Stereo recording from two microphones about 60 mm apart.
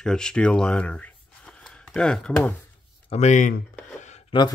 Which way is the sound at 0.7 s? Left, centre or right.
Left.